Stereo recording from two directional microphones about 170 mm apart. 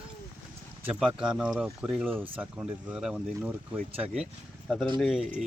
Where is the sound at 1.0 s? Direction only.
5° right (ahead or behind).